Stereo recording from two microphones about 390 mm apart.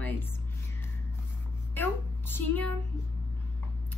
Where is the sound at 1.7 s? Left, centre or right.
Centre.